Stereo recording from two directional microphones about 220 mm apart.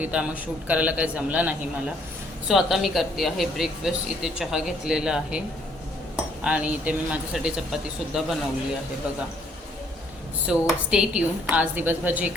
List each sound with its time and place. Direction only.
0.0 s a woman's voice: 5° right (ahead or behind)
6.4 s a woman's voice: 5° right (ahead or behind)
10.4 s a woman's voice: 5° right (ahead or behind)